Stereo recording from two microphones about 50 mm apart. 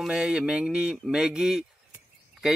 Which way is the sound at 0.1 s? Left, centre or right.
Centre.